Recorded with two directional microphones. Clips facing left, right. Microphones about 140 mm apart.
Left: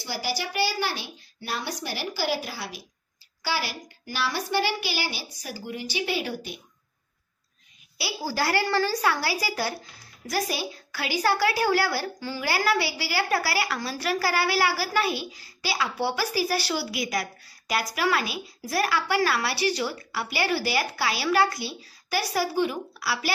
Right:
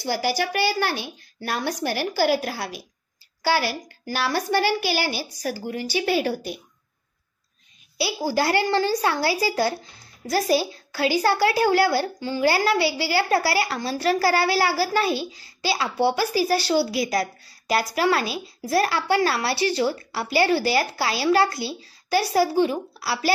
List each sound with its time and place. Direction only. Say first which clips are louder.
0.0 s a child's voice: right 7 dB; 50° right (ahead or behind)
8.0 s a woman's voice: right 5 dB; 20° right (ahead or behind)